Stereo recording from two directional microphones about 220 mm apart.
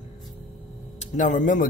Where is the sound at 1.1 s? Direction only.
35° left (ahead or behind).